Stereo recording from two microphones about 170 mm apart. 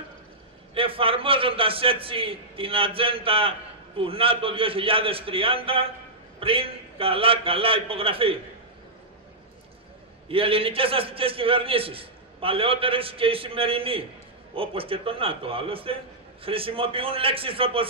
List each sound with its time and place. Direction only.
0.7 s a man's voice: 35° right (ahead or behind)
10.2 s a man's voice: 35° right (ahead or behind)